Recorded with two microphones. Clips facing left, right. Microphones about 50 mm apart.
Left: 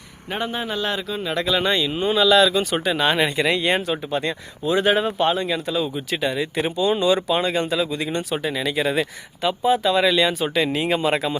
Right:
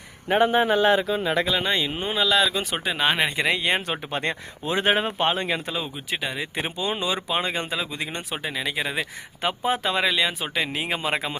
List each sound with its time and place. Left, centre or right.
0.3 s speech: right
1.8 s speech: right
2.1 s speech: centre
3.8 s speech: right
5.8 s speech: centre
9.0 s speech: right
10.0 s speech: centre